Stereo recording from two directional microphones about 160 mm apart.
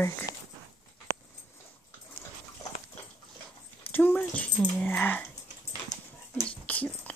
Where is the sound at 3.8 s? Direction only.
10° left (ahead or behind).